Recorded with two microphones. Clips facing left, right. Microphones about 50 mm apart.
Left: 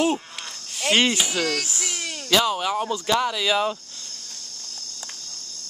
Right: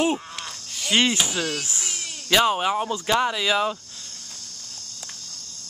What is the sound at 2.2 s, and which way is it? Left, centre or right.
Speech, right.